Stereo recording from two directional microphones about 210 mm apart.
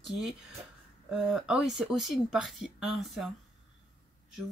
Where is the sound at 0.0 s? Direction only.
Centre (ahead or behind).